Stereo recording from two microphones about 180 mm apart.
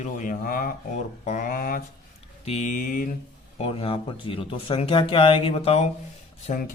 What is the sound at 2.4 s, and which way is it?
Speech, 40° left (ahead or behind).